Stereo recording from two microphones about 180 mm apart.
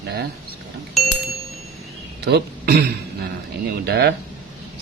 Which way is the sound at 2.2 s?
65° right (ahead or behind).